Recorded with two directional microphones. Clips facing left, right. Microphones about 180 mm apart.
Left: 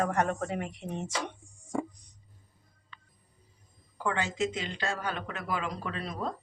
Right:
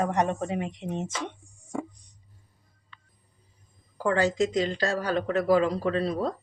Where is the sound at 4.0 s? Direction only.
40° right (ahead or behind).